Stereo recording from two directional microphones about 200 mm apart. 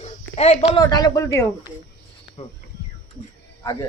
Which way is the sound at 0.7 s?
20° left (ahead or behind).